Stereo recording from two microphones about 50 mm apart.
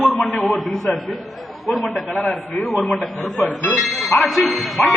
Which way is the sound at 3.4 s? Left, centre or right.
Left.